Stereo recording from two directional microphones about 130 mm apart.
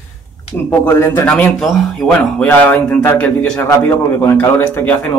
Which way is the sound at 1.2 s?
5° left (ahead or behind).